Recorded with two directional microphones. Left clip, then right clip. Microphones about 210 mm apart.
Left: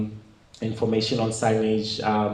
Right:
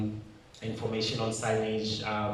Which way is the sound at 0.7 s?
45° left (ahead or behind).